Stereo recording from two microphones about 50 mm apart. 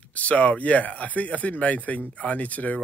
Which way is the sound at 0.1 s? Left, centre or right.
Left.